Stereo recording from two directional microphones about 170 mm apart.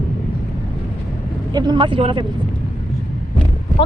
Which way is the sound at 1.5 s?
25° right (ahead or behind).